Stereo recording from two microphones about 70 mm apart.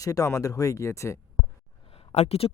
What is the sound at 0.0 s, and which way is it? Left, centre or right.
Speech, left.